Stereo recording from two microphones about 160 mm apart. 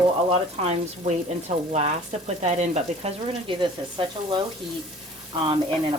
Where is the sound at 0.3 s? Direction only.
40° right (ahead or behind).